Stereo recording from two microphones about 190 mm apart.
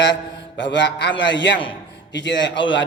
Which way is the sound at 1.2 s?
70° left (ahead or behind).